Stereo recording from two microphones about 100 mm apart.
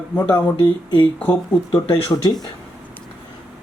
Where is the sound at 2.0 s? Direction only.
40° left (ahead or behind).